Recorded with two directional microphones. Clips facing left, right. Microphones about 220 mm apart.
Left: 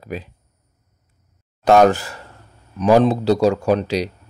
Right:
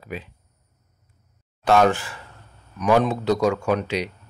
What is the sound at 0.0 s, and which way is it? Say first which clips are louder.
Speech: left 4 dB; 40° left (ahead or behind).